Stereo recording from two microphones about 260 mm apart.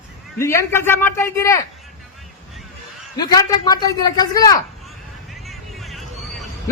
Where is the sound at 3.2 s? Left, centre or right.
Centre.